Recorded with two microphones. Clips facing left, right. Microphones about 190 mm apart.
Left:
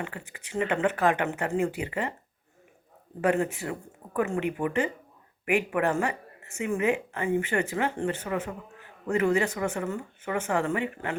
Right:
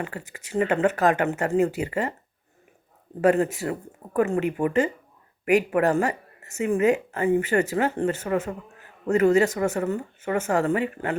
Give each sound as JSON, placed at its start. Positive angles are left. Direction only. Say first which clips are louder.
{"t": 0.0, "sound": "speech", "louder": "right 4 dB", "side_deg": -40}
{"t": 3.2, "sound": "speech", "louder": "right 5 dB", "side_deg": -40}